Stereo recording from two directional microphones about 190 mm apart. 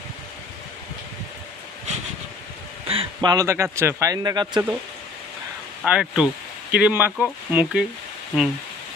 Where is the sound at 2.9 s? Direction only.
25° right (ahead or behind).